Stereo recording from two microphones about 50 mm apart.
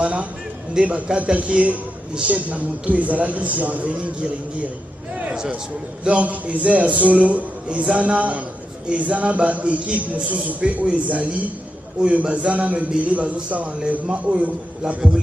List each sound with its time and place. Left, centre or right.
0.0 s a man's voice: right
6.0 s a man's voice: right